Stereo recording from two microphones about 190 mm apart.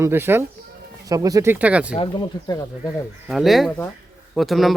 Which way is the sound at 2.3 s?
20° left (ahead or behind).